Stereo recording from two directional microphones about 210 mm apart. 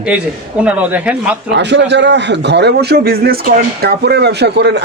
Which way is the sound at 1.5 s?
55° right (ahead or behind).